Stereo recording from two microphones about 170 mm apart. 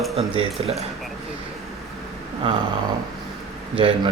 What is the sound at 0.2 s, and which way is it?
Speech, 35° right (ahead or behind).